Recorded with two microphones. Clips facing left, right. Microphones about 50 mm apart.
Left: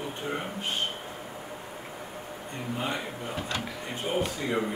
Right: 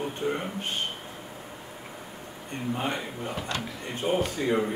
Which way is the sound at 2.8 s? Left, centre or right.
Right.